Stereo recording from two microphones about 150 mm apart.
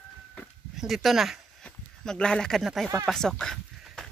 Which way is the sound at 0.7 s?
Centre (ahead or behind).